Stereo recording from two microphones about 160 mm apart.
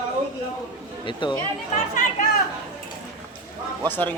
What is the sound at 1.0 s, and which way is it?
Speech, 30° left (ahead or behind).